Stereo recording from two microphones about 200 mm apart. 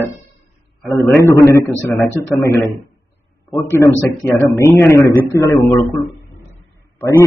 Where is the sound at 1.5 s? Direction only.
15° left (ahead or behind).